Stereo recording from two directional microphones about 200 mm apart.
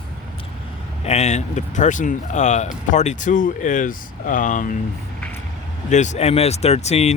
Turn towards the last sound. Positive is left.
turn(degrees=35)  # may be behind; listen again after turning